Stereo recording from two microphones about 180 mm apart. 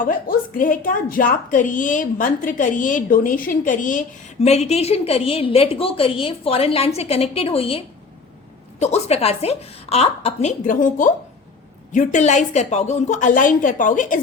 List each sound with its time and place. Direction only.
0.0 s a woman's voice: 50° left (ahead or behind); by 7.8 s 30° left (ahead or behind)
8.8 s a woman's voice: 35° left (ahead or behind)